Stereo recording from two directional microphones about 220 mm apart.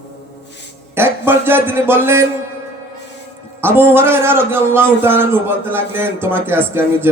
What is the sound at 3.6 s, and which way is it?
A man's voice, 10° right (ahead or behind).